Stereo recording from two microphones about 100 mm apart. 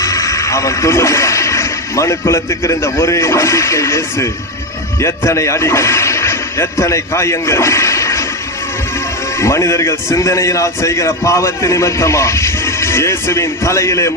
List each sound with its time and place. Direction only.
0.0 s speech: 35° left (ahead or behind)
9.4 s a man's voice: 30° left (ahead or behind)